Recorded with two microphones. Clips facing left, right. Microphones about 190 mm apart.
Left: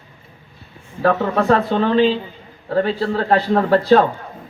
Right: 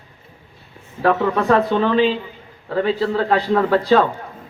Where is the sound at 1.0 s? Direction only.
35° left (ahead or behind).